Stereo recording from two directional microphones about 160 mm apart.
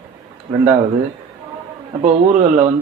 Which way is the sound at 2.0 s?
50° right (ahead or behind).